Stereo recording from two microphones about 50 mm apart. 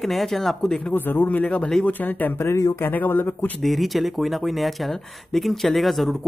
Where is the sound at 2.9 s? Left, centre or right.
Left.